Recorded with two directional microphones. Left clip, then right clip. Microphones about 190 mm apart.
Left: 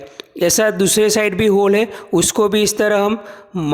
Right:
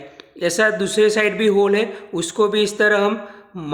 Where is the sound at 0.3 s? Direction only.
50° left (ahead or behind).